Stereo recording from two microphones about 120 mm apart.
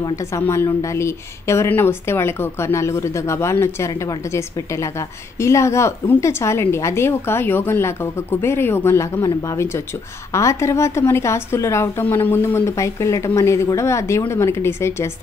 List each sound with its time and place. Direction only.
0.1 s a woman's voice: 25° left (ahead or behind)